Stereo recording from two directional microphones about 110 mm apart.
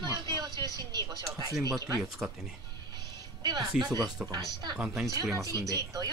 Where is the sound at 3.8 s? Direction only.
35° right (ahead or behind).